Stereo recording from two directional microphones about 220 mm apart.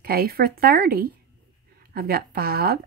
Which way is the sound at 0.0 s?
45° right (ahead or behind).